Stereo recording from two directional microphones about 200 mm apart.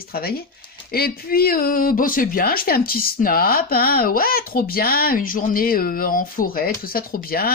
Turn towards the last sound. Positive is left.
turn(degrees=45)  # may be behind; listen again after turning